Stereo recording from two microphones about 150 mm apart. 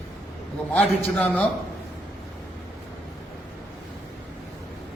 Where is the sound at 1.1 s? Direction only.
10° left (ahead or behind).